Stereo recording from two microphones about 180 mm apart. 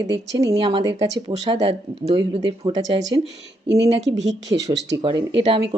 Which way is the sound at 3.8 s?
85° right.